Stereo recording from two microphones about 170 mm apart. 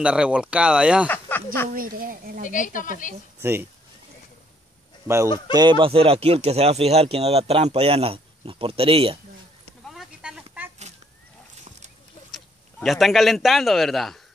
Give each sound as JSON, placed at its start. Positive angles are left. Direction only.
{"t": 0.0, "sound": "speech", "side_deg": -5}
{"t": 1.0, "sound": "speech", "side_deg": 10}
{"t": 1.7, "sound": "a woman's voice", "side_deg": -55}
{"t": 2.4, "sound": "speech", "side_deg": 50}
{"t": 5.0, "sound": "speech", "side_deg": -15}
{"t": 9.8, "sound": "a sound", "side_deg": 0}
{"t": 12.4, "sound": "speech", "side_deg": 0}